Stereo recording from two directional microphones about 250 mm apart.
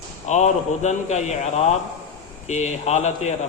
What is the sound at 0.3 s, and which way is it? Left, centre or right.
A man's voice, left.